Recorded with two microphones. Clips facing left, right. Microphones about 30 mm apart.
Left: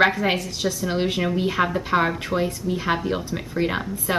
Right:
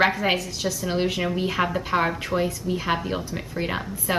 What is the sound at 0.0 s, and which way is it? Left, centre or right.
A woman's voice, centre.